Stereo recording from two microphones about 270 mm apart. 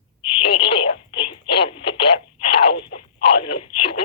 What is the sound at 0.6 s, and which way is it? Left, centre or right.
Telephone, centre.